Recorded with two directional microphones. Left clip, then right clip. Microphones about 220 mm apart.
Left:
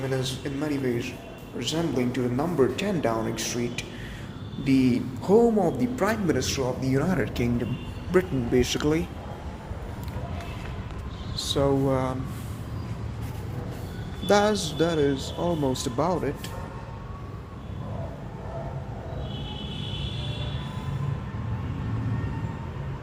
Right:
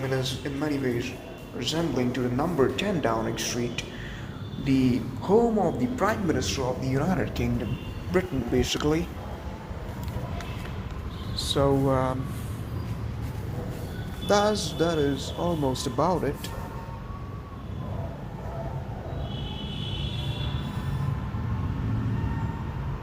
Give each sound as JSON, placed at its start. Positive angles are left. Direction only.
{"t": 0.1, "sound": "a man's voice", "side_deg": 20}
{"t": 11.5, "sound": "speech", "side_deg": 10}
{"t": 14.3, "sound": "a man's voice", "side_deg": 35}
{"t": 16.0, "sound": "speech", "side_deg": 10}